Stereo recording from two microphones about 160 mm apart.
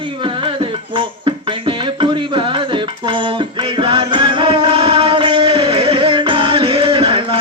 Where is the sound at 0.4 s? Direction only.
30° right (ahead or behind).